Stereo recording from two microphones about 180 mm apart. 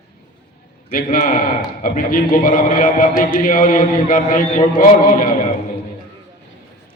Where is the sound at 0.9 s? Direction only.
50° left (ahead or behind).